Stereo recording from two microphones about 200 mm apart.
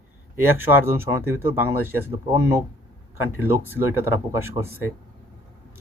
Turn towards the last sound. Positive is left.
turn(degrees=-10)  # may be behind; listen again after turning